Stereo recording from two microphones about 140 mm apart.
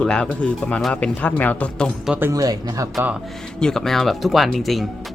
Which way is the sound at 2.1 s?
15° right (ahead or behind).